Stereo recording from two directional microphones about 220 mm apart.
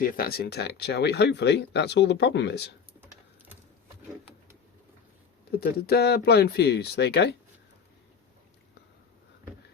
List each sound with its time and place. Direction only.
0.0 s speech: 40° left (ahead or behind)
5.5 s speech: 45° left (ahead or behind)